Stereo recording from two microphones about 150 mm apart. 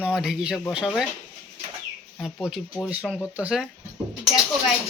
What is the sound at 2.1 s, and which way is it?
Speech, centre (ahead or behind).